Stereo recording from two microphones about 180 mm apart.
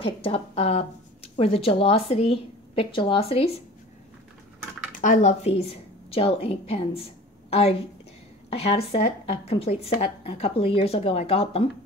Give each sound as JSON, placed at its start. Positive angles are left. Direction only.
{"t": 0.0, "sound": "speech", "side_deg": 30}
{"t": 5.0, "sound": "a woman's voice", "side_deg": 45}